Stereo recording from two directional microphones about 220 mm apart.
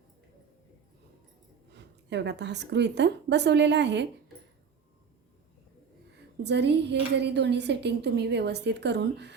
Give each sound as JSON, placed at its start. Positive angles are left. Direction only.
{"t": 1.7, "sound": "speech", "side_deg": -50}
{"t": 6.4, "sound": "speech", "side_deg": -50}